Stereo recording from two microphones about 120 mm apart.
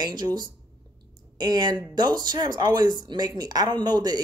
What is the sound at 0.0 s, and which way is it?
Speech, 35° right (ahead or behind).